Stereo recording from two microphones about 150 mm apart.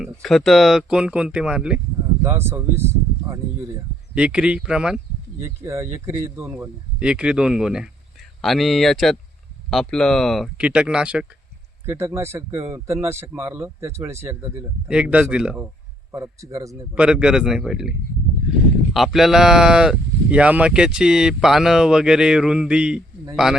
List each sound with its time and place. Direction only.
0.0 s speech: centre (ahead or behind)
2.2 s speech: 15° right (ahead or behind)
5.4 s speech: 20° right (ahead or behind)
7.0 s speech: 5° right (ahead or behind)
11.9 s speech: 15° right (ahead or behind)
16.1 s speech: 20° right (ahead or behind)
16.9 s speech: 5° right (ahead or behind)
18.9 s speech: centre (ahead or behind)